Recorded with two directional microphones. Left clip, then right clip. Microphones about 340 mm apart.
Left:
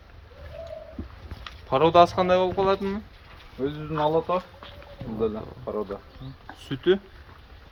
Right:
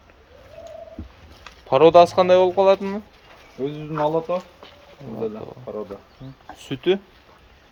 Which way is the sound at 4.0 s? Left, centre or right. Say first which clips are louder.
Right 2 dB; centre.